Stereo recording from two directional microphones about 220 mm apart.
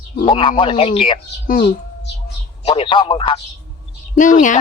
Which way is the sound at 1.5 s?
45° left (ahead or behind).